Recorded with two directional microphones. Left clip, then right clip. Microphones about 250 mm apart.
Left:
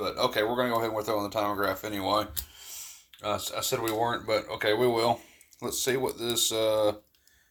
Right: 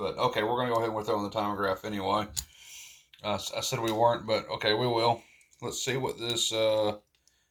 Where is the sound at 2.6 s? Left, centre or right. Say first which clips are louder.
Left 3 dB; left.